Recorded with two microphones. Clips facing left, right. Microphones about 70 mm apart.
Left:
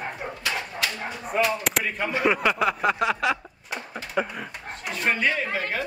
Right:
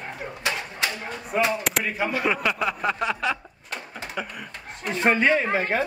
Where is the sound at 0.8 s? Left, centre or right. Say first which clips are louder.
Right 3 dB; right.